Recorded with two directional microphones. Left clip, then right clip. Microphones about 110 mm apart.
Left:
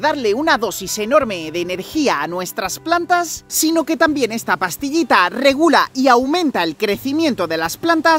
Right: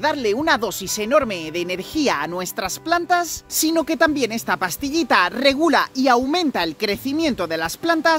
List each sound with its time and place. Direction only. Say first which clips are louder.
0.0 s speech: left 3 dB; 55° left (ahead or behind)
3.5 s speech: left 3 dB; 35° left (ahead or behind)